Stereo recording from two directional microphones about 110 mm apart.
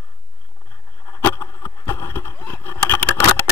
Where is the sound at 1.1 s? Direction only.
25° left (ahead or behind).